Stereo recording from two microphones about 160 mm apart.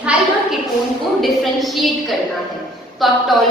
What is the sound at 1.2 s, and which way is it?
Speech, centre (ahead or behind).